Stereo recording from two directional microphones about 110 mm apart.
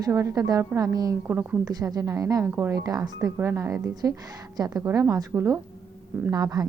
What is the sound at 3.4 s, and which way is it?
A woman's voice, 25° right (ahead or behind).